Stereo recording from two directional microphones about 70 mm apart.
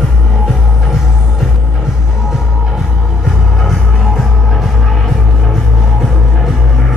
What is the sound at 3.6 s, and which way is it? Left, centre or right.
Music, centre.